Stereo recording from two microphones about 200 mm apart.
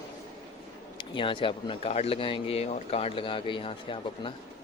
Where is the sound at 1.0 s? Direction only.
25° left (ahead or behind).